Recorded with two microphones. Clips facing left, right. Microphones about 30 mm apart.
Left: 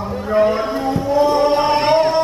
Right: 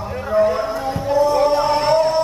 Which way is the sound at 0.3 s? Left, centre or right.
Left.